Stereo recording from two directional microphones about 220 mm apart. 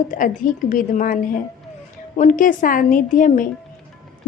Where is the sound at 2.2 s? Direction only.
35° left (ahead or behind).